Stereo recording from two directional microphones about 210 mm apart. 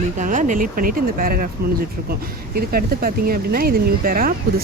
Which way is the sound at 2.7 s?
45° right (ahead or behind).